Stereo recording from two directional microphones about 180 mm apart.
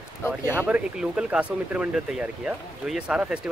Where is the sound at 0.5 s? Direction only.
5° right (ahead or behind).